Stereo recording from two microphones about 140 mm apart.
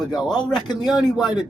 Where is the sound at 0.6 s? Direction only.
30° left (ahead or behind).